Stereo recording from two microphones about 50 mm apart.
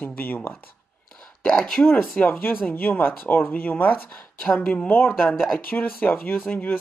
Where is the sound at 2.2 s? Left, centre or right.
Left.